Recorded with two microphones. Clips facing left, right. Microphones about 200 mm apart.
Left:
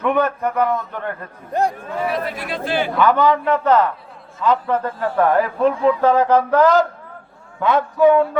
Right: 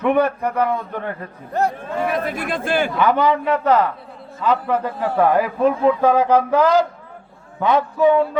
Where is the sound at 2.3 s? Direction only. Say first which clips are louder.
Right 2 dB; 50° right (ahead or behind).